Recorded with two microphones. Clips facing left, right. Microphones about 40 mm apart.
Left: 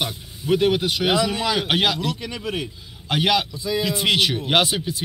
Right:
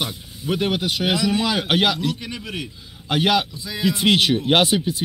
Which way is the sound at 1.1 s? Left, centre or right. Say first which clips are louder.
Even; left.